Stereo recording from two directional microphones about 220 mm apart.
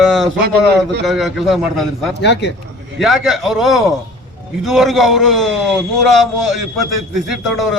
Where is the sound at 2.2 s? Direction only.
50° left (ahead or behind).